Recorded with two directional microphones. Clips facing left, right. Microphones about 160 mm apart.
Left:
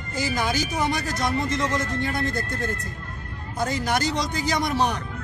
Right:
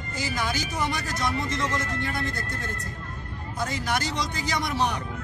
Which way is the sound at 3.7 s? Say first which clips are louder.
Left 5 dB; 40° left (ahead or behind).